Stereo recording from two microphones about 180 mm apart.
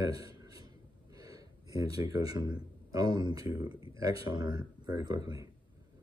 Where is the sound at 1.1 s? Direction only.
20° right (ahead or behind).